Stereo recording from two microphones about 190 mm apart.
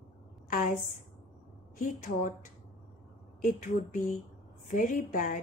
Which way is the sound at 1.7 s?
45° left (ahead or behind).